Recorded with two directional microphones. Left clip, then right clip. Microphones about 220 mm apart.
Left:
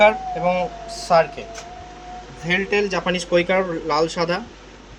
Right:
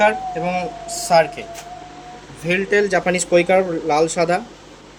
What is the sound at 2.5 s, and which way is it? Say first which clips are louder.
Speech: right 3 dB; 15° right (ahead or behind).